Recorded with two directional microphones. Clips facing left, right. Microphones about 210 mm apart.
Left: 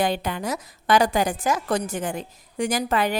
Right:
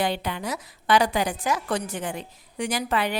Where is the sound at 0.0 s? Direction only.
45° left (ahead or behind).